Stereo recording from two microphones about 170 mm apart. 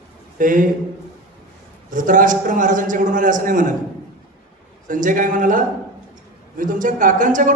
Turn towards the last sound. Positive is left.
turn(degrees=-50)  # may be behind; listen again after turning